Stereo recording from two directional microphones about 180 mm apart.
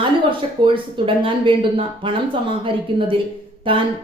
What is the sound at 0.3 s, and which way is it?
A woman's voice, 30° right (ahead or behind).